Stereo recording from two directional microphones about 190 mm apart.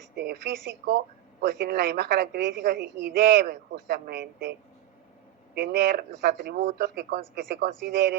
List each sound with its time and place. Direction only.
0.2 s a woman's voice: 60° right (ahead or behind)
5.5 s a woman's voice: 60° right (ahead or behind)